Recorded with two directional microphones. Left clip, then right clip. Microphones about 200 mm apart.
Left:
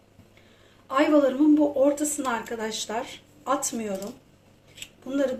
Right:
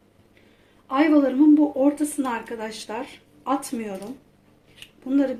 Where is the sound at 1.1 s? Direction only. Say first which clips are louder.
Right 3 dB; 25° right (ahead or behind).